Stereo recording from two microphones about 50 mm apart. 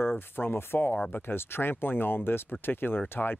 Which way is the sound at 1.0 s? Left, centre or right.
Left.